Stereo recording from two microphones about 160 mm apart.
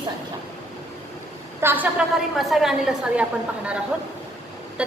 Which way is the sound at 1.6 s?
10° right (ahead or behind).